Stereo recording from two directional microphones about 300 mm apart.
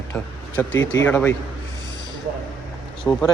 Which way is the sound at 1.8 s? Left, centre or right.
Left.